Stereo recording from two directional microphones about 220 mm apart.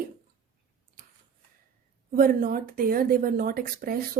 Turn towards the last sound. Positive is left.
turn(degrees=-40)  # may be behind; listen again after turning